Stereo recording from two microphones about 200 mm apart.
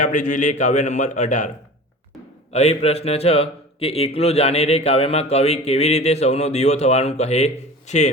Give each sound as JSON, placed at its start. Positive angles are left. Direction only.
{"t": 0.0, "sound": "a man's voice", "side_deg": 40}
{"t": 2.5, "sound": "a man's voice", "side_deg": 30}